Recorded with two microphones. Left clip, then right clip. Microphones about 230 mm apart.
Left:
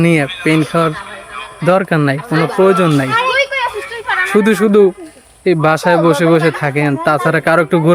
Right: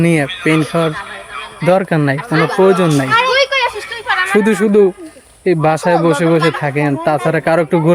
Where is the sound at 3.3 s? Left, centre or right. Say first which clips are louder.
Right 2 dB; right.